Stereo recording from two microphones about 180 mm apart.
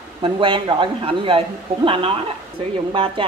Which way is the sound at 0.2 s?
30° right (ahead or behind).